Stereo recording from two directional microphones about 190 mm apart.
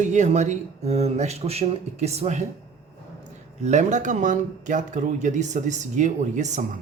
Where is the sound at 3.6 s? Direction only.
40° right (ahead or behind).